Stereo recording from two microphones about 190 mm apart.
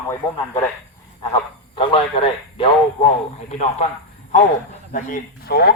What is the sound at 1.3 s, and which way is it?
Speech, 30° left (ahead or behind).